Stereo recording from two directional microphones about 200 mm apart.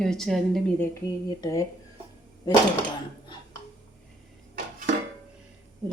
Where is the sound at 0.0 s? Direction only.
Centre (ahead or behind).